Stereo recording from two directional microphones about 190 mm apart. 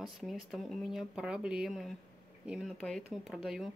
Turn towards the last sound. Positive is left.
turn(degrees=0)  # may be behind; listen again after turning